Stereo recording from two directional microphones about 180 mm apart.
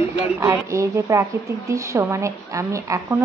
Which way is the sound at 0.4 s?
15° right (ahead or behind).